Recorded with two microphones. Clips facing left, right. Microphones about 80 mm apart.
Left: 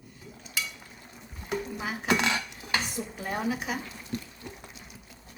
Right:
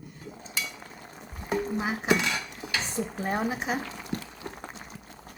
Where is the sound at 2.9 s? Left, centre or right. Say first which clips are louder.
Right 4 dB; right.